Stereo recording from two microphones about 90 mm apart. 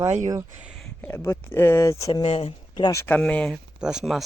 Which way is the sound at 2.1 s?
90° left.